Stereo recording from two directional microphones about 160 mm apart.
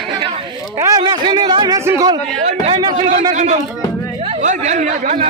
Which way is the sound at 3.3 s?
45° right (ahead or behind).